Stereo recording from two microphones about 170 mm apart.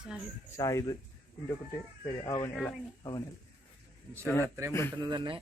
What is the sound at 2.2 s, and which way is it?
Speech, 20° left (ahead or behind).